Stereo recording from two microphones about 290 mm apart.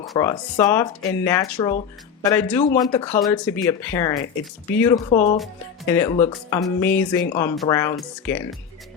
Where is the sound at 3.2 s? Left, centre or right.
Centre.